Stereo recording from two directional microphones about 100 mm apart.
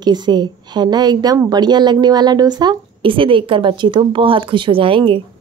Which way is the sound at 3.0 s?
60° right (ahead or behind).